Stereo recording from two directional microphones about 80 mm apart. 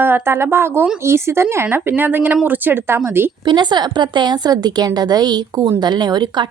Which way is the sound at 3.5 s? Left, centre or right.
Right.